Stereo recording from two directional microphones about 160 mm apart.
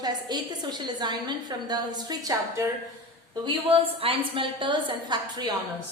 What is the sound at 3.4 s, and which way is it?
A woman's voice, 35° right (ahead or behind).